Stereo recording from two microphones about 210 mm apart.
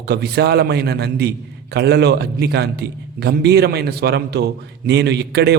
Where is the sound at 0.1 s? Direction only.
50° right (ahead or behind).